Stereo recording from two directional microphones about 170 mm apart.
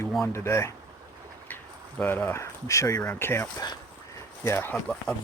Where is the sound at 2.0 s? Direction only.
10° left (ahead or behind).